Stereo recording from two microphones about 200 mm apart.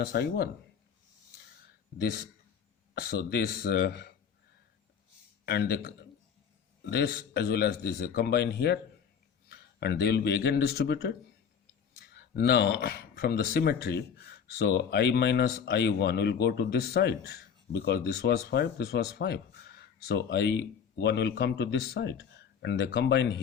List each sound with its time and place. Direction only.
0.0 s a man's voice: 50° left (ahead or behind)
2.9 s a man's voice: 50° left (ahead or behind)
5.5 s a man's voice: 55° left (ahead or behind)